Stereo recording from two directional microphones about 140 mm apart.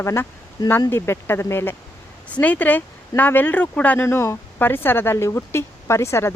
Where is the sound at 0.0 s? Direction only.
20° left (ahead or behind).